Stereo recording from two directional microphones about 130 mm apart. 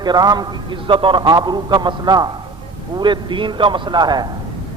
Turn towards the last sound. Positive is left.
turn(degrees=-35)  # may be behind; listen again after turning